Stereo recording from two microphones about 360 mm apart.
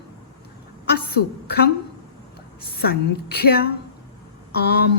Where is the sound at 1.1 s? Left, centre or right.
Left.